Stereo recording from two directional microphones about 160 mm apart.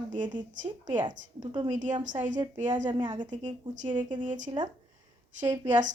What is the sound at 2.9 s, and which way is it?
Speech, 30° right (ahead or behind).